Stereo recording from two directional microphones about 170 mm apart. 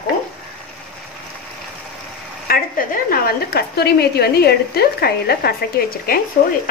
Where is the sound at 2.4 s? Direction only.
55° left (ahead or behind).